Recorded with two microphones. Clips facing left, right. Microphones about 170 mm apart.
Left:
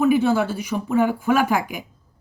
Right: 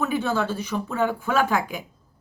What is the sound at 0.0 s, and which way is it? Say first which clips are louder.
A woman's voice: left 7 dB; 10° left (ahead or behind).